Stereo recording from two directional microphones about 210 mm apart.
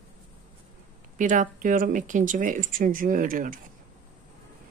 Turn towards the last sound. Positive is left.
turn(degrees=-40)  # may be behind; listen again after turning